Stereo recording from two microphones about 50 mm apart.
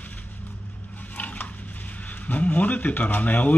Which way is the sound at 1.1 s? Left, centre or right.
Left.